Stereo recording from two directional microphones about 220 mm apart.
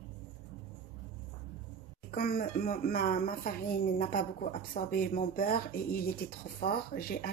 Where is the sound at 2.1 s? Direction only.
45° left (ahead or behind).